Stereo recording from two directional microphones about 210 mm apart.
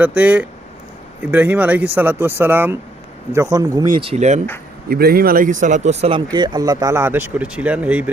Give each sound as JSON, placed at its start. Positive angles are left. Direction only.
{"t": 0.0, "sound": "speech", "side_deg": -5}
{"t": 4.9, "sound": "speech", "side_deg": -45}